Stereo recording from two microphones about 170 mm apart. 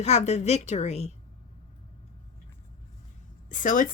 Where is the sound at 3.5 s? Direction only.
50° left (ahead or behind).